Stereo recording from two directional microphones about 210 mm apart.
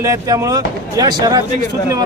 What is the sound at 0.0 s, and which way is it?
Speech, 15° right (ahead or behind).